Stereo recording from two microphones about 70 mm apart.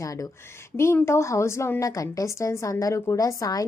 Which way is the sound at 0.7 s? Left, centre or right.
Left.